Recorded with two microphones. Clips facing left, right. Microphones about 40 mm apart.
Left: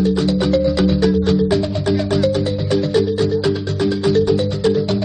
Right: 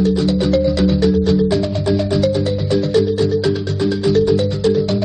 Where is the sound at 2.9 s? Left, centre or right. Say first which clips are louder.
Right 2 dB; centre.